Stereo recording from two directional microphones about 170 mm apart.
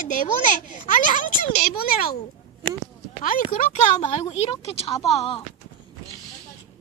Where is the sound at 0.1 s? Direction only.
50° left (ahead or behind).